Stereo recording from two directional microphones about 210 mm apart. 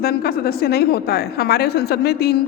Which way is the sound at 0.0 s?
45° left (ahead or behind).